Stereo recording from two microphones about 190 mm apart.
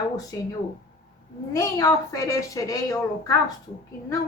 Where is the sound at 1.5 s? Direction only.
15° left (ahead or behind).